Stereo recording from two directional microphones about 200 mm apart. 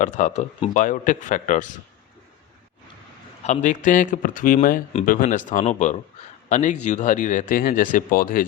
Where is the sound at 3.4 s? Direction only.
35° left (ahead or behind).